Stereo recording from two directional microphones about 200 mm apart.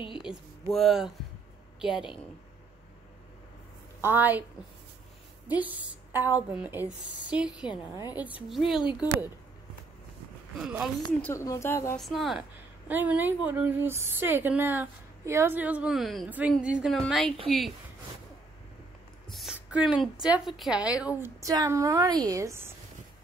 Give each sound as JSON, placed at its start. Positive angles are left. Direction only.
{"t": 0.2, "sound": "a sound", "side_deg": 0}
{"t": 1.8, "sound": "a woman's voice", "side_deg": -5}
{"t": 4.0, "sound": "a woman's voice", "side_deg": -10}
{"t": 5.5, "sound": "a woman's voice", "side_deg": -10}
{"t": 7.4, "sound": "a woman's voice", "side_deg": 20}
{"t": 8.5, "sound": "a woman's voice", "side_deg": 0}
{"t": 10.6, "sound": "a woman's voice", "side_deg": -5}
{"t": 11.1, "sound": "a woman's voice", "side_deg": 5}
{"t": 12.0, "sound": "a woman's voice", "side_deg": 0}
{"t": 19.3, "sound": "a woman's voice", "side_deg": -5}